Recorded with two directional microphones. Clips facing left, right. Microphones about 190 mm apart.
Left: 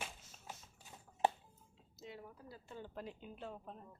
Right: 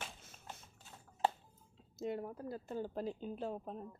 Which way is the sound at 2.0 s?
50° right (ahead or behind).